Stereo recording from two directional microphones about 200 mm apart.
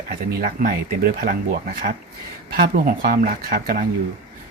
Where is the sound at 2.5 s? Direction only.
45° right (ahead or behind).